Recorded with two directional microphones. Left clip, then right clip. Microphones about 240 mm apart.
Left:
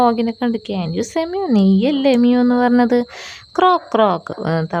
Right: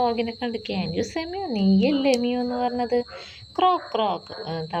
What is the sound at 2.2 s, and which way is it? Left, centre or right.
Speech, left.